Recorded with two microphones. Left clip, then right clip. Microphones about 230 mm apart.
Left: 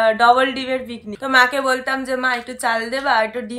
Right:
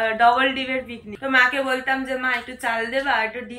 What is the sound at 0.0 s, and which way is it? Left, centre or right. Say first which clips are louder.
A woman's voice: left 4 dB; centre.